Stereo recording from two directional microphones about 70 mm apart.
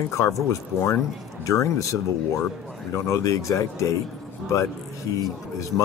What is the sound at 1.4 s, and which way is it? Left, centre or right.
Speech, left.